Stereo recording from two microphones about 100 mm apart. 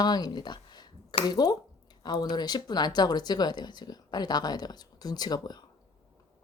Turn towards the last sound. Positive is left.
turn(degrees=40)  # may be behind; listen again after turning